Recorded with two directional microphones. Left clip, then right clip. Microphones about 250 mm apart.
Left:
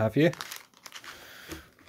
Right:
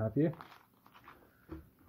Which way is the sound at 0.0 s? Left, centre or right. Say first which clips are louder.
Left 9 dB; left.